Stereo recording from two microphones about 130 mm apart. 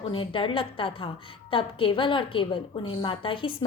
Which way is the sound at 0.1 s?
40° left (ahead or behind).